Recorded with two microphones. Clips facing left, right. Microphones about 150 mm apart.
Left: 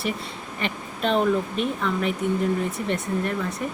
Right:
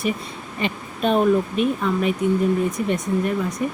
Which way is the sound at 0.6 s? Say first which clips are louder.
Right 4 dB; 15° right (ahead or behind).